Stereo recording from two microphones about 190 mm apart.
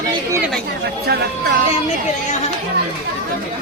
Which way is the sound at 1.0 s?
60° right (ahead or behind).